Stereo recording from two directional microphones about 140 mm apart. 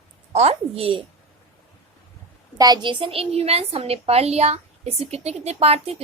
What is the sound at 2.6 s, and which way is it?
A woman's voice, 30° right (ahead or behind).